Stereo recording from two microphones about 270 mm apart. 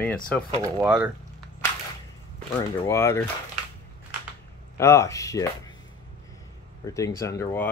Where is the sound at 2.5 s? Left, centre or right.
Centre.